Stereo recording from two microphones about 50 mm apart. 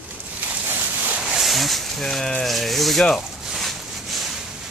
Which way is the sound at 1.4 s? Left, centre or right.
Centre.